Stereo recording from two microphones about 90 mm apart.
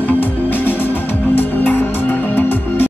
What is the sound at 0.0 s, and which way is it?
Music, 20° left (ahead or behind).